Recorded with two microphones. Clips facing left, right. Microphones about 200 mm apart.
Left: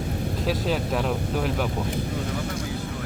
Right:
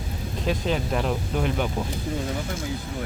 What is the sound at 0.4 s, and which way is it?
Speech, centre (ahead or behind).